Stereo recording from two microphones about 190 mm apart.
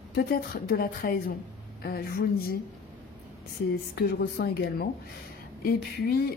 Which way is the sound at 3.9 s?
55° left (ahead or behind).